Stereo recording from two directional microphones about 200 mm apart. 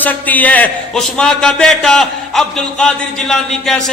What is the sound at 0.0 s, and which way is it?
A man's voice, 10° left (ahead or behind).